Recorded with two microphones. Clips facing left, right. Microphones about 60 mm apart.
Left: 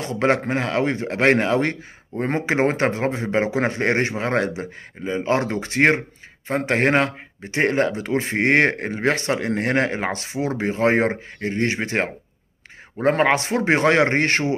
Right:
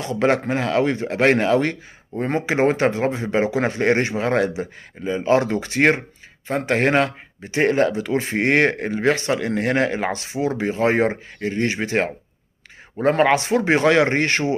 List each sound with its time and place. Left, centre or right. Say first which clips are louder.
0.0 s speech: right 1 dB; left